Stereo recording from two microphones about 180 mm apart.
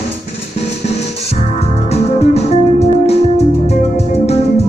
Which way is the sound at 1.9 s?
35° left (ahead or behind).